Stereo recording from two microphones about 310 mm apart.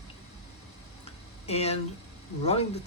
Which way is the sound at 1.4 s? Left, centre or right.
Centre.